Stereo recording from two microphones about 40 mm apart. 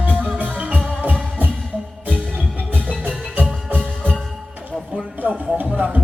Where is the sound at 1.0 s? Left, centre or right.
Right.